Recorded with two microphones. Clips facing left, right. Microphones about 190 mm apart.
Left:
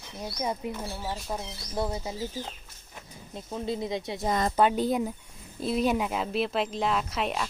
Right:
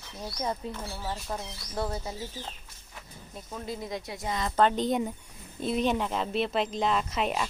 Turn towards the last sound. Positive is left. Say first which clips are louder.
# right 1 dB
turn(degrees=0)  # may be behind; listen again after turning